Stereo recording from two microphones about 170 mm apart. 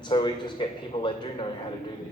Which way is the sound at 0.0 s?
25° left (ahead or behind).